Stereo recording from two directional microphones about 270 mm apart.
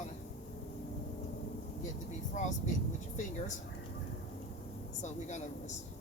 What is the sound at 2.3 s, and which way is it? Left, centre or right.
Speech, left.